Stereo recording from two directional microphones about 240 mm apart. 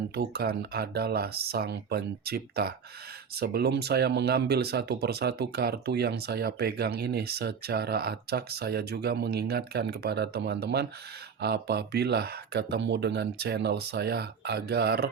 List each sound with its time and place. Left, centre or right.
0.1 s speech: right